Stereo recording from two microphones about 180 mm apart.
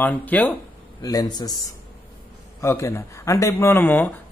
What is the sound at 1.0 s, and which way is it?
Speech, 20° left (ahead or behind).